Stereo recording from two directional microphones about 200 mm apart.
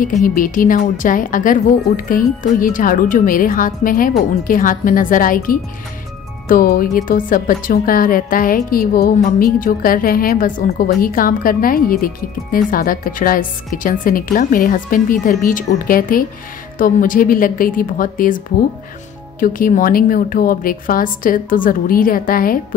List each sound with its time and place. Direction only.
0.2 s a woman's voice: 45° left (ahead or behind)
19.4 s a woman's voice: 45° left (ahead or behind)